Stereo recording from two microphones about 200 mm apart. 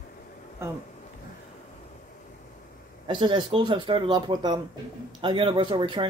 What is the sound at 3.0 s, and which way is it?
Speech, 25° right (ahead or behind).